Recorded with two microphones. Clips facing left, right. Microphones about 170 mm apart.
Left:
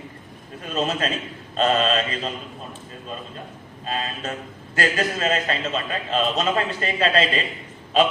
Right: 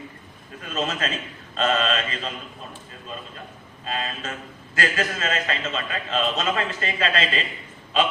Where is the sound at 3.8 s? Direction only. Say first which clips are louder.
Left 2 dB; 35° left (ahead or behind).